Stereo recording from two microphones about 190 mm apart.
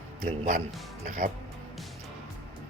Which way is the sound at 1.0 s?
40° right (ahead or behind).